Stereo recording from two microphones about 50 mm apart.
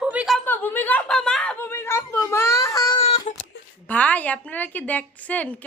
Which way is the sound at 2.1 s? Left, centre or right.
Left.